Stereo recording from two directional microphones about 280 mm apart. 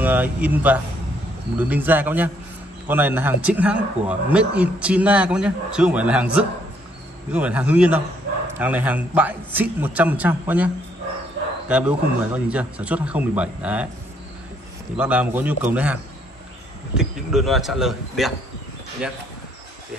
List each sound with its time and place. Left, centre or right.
0.0 s speech: centre
7.3 s speech: centre
11.7 s speech: centre
15.0 s speech: centre